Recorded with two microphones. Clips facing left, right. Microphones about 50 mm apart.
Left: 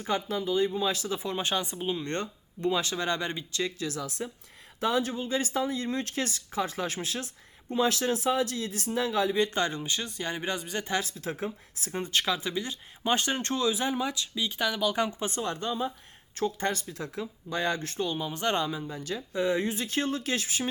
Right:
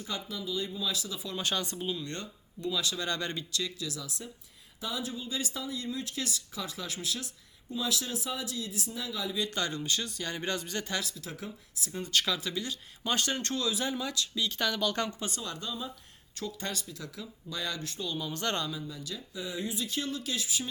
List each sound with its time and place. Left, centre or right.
0.0 s speech: left
1.4 s speech: left
3.5 s speech: left
11.0 s speech: left; by 15.3 s centre
15.3 s speech: left